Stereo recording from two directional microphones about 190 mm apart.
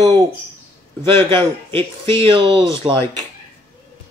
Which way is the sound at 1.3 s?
25° right (ahead or behind).